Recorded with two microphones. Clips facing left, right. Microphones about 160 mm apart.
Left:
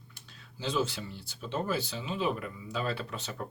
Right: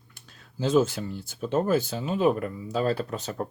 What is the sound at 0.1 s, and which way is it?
Speech, 45° right (ahead or behind).